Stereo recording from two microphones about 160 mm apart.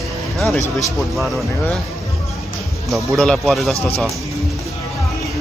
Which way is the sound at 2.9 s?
Centre (ahead or behind).